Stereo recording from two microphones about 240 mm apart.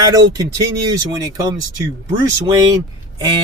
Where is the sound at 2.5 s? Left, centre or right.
Centre.